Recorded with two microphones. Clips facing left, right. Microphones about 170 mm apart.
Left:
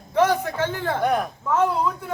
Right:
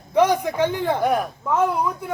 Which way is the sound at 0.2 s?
15° right (ahead or behind).